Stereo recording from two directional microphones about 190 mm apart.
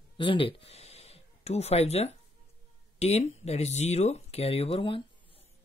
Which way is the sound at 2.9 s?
35° left (ahead or behind).